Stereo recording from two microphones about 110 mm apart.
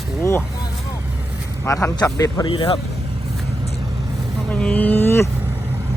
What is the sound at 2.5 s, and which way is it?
Speech, 50° left (ahead or behind).